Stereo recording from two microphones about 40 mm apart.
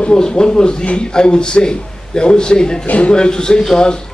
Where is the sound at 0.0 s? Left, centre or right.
Left.